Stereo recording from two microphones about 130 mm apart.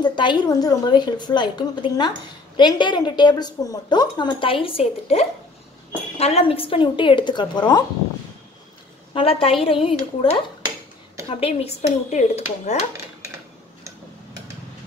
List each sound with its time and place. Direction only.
0.0 s a woman's voice: 35° left (ahead or behind)
9.1 s a woman's voice: 45° left (ahead or behind)
11.2 s speech: 50° left (ahead or behind)